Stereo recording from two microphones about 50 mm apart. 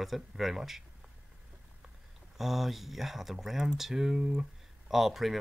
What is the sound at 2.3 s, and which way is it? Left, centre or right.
Speech, centre.